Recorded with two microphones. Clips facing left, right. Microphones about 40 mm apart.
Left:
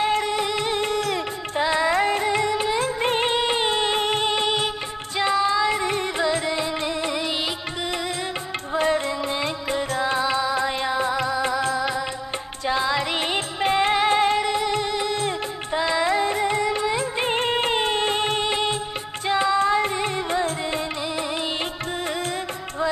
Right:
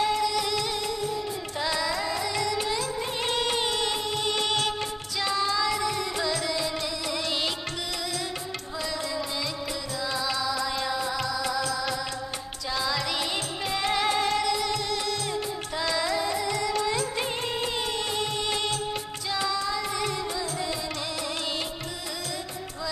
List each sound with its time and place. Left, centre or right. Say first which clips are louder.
0.0 s music: left 3 dB; left
0.9 s music: left 6 dB; left
1.6 s music: left 8 dB; left
3.0 s music: left 8 dB; left
3.3 s music: left 5 dB; left
4.3 s music of bollywood: left 4 dB; left
5.1 s music: left 7 dB; left
8.7 s music: left 10 dB; left
18.5 s music of bollywood: left 5 dB; left
19.2 s music: left 9 dB; left